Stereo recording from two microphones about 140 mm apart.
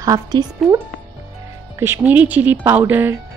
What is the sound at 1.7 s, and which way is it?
Speech, 15° right (ahead or behind).